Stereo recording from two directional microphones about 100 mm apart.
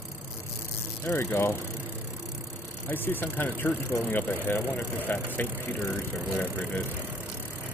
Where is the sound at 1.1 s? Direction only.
25° left (ahead or behind).